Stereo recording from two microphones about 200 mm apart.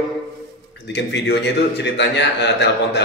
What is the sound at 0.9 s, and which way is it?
A man's voice, 60° left (ahead or behind).